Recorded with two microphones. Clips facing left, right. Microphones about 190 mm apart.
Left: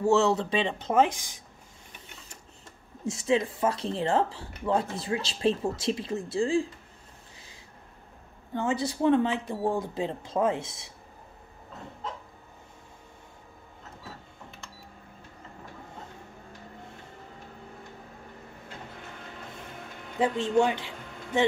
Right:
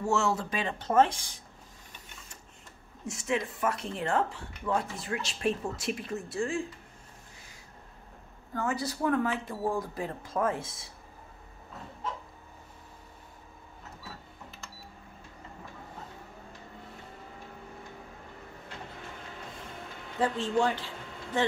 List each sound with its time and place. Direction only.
0.0 s speech: 25° left (ahead or behind)
3.1 s speech: 30° left (ahead or behind)
8.5 s speech: 25° left (ahead or behind)
20.2 s speech: 20° left (ahead or behind)